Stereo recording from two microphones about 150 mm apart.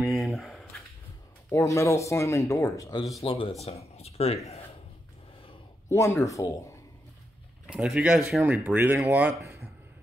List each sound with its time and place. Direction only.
0.0 s a sound: centre (ahead or behind)
1.5 s speech: 20° left (ahead or behind)
3.2 s speech: 35° left (ahead or behind)
5.9 s speech: 20° left (ahead or behind)
7.6 s speech: 5° right (ahead or behind)